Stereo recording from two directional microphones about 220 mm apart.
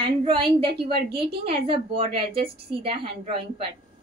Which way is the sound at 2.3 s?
45° right (ahead or behind).